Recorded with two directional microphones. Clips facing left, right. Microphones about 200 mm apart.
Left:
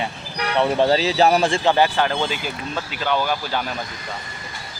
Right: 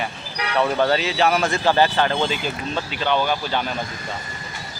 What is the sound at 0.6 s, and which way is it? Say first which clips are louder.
Speech: left 2 dB; 25° left (ahead or behind).